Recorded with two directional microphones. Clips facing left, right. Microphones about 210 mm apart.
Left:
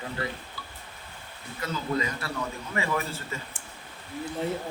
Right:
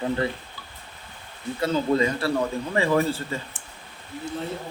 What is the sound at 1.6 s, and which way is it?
A man's voice, 30° right (ahead or behind).